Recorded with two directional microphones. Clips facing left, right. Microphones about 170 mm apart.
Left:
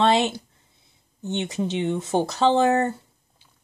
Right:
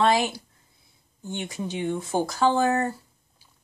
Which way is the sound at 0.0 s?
25° left (ahead or behind).